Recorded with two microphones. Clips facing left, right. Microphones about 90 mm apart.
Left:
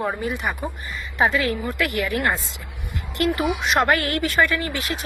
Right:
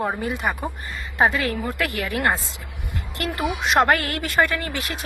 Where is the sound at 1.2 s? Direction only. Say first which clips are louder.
Even; 25° right (ahead or behind).